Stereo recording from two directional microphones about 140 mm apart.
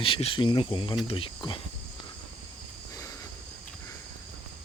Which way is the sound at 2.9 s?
25° left (ahead or behind).